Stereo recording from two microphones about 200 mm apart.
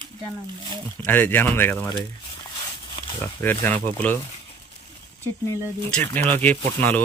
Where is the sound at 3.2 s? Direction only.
10° left (ahead or behind).